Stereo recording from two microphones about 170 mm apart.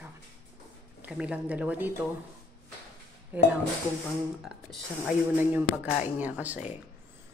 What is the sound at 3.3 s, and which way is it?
Speech, 10° right (ahead or behind).